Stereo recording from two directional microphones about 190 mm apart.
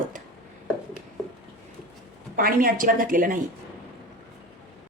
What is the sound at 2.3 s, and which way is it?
A woman's voice, 50° right (ahead or behind).